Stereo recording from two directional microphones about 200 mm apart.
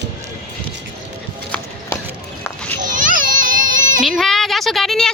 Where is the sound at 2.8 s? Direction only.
40° right (ahead or behind).